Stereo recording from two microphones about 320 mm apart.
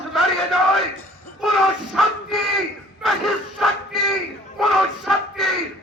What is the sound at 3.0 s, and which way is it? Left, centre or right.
Battle cry, centre.